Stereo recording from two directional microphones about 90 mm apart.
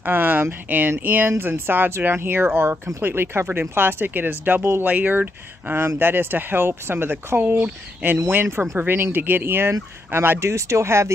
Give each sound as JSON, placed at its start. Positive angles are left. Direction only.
{"t": 0.0, "sound": "speech", "side_deg": -20}